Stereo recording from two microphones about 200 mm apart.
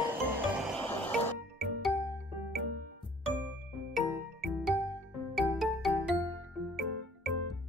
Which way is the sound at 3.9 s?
Centre (ahead or behind).